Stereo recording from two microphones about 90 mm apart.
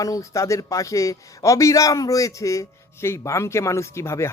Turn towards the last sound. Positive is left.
turn(degrees=30)  # may be behind; listen again after turning